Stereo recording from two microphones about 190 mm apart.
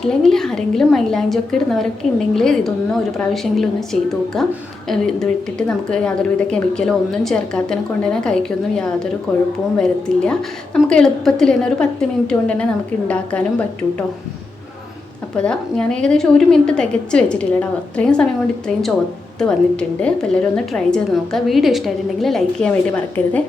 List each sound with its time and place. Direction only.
0.0 s a woman's voice: 5° left (ahead or behind)
15.4 s a woman's voice: 5° left (ahead or behind)
19.4 s a woman's voice: 5° left (ahead or behind)